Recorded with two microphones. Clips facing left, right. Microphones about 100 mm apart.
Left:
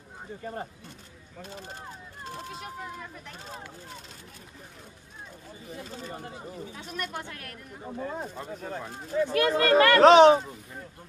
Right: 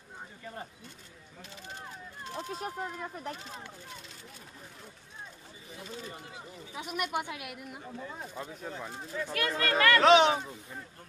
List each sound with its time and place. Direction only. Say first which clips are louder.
0.4 s speech: left 7 dB; 40° left (ahead or behind)
5.9 s speech: left 1 dB; 40° left (ahead or behind)
6.7 s speech: right 6 dB; 10° right (ahead or behind)
8.0 s speech: left 8 dB; 55° left (ahead or behind)
9.1 s speech: left 9 dB; 30° left (ahead or behind)
9.5 s speech: left 5 dB; 40° left (ahead or behind)